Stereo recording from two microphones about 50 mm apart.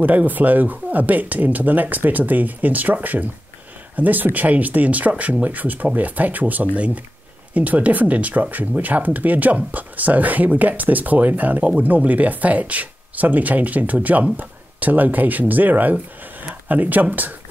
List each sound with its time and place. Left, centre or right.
0.0 s speech: right